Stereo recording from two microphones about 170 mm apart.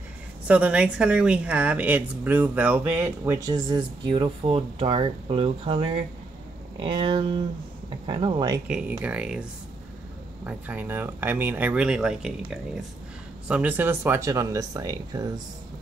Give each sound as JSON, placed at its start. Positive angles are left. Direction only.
{"t": 0.5, "sound": "a woman's voice", "side_deg": -5}
{"t": 8.6, "sound": "a woman's voice", "side_deg": -5}